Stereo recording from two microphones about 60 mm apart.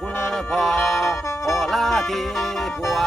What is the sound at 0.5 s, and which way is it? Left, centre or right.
Music, centre.